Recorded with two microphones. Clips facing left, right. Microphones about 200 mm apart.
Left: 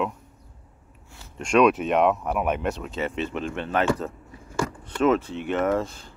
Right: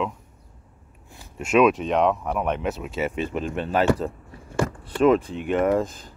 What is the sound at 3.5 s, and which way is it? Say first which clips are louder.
Speech: right 3 dB; 35° right (ahead or behind).